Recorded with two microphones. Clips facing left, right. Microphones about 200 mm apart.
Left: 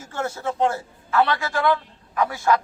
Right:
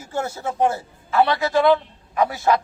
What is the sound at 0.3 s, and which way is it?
A man's voice, 20° right (ahead or behind).